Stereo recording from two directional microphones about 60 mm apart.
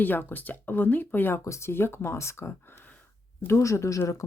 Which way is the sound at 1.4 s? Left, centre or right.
Left.